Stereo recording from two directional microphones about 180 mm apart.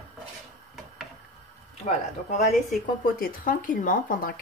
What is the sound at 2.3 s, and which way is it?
Speech, 40° left (ahead or behind).